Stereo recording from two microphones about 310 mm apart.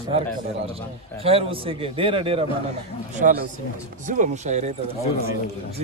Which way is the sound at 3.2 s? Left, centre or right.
Right.